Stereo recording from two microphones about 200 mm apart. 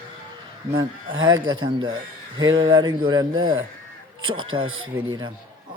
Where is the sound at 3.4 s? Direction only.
85° right.